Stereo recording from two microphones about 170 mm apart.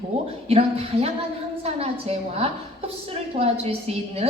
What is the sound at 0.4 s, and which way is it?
A woman's voice, 35° right (ahead or behind).